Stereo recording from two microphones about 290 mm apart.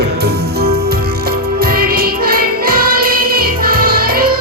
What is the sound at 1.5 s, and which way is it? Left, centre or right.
Music, right.